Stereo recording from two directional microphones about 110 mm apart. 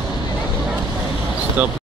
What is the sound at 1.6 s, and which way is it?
Speech, 15° right (ahead or behind).